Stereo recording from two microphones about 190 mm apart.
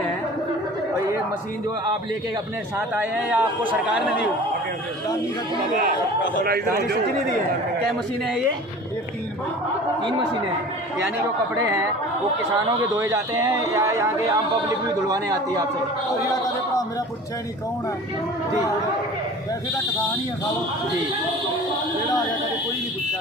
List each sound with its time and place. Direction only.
3.0 s a man's voice: 10° right (ahead or behind)
6.4 s a man's voice: 55° right (ahead or behind)
11.5 s a man's voice: 15° right (ahead or behind)
12.9 s a man's voice: 15° right (ahead or behind)
16.2 s speech: 15° left (ahead or behind)